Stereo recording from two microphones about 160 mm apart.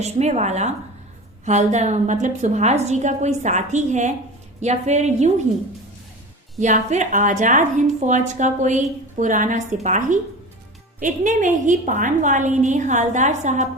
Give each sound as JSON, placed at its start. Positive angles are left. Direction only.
{"t": 0.0, "sound": "a woman's voice", "side_deg": -45}
{"t": 6.6, "sound": "a woman's voice", "side_deg": -50}